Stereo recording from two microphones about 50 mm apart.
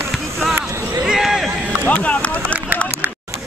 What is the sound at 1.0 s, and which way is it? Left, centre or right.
Run, centre.